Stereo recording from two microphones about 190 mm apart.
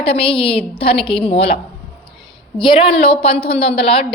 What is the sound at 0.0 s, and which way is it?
A woman's voice, 30° left (ahead or behind).